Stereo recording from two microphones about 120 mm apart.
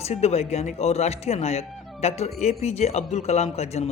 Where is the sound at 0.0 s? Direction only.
60° left (ahead or behind).